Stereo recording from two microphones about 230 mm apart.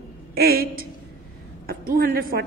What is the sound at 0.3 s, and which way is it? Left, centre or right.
A woman's voice, right.